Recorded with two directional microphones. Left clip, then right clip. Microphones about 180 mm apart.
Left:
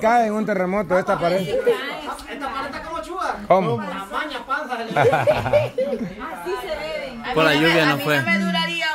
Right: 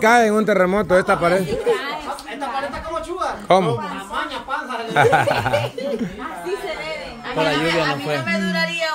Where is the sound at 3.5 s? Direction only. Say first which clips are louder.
Right 1 dB; 20° right (ahead or behind).